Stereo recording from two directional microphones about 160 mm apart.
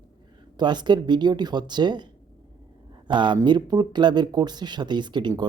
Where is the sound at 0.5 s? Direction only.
25° right (ahead or behind).